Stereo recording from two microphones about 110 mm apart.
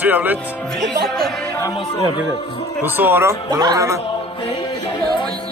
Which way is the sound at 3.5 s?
30° right (ahead or behind).